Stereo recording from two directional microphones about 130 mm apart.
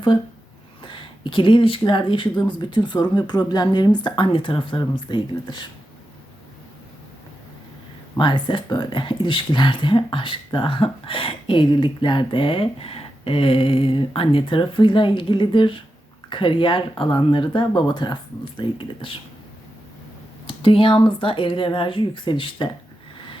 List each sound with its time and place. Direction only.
0.8 s speech: 40° left (ahead or behind)
8.2 s speech: 35° left (ahead or behind)
20.5 s speech: 45° left (ahead or behind)